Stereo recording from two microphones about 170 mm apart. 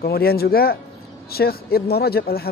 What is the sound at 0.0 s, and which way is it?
Speech, 65° left (ahead or behind).